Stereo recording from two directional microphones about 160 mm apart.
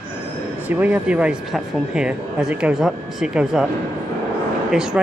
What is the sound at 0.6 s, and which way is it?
Speech, 10° right (ahead or behind).